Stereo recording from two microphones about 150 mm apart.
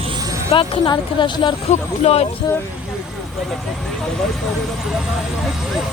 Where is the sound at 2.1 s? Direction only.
45° left (ahead or behind).